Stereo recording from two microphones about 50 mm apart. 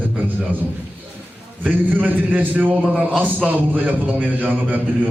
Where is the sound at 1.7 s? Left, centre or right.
Right.